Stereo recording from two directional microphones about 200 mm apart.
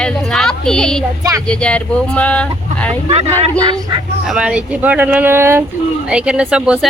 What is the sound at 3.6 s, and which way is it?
Speech, 20° right (ahead or behind).